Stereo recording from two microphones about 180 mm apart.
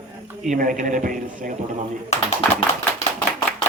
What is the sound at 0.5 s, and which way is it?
A man's voice, 50° right (ahead or behind).